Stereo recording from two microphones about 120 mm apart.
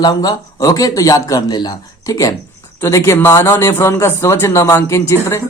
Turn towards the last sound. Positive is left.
turn(degrees=25)  # may be behind; listen again after turning